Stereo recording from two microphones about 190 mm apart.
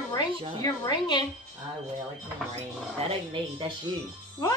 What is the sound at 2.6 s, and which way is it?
Speech, 30° right (ahead or behind).